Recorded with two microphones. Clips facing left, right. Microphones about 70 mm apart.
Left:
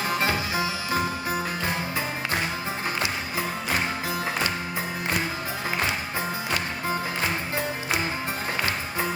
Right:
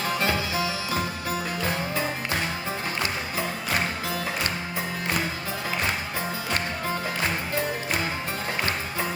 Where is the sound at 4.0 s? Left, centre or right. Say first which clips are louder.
Left 1 dB; left.